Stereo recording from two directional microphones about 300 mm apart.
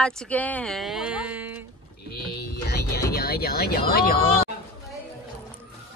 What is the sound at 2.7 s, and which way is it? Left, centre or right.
Music, left.